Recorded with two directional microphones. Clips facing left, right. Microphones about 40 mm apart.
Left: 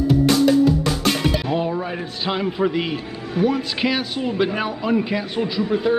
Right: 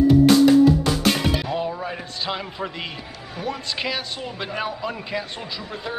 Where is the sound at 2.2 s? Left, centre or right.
Centre.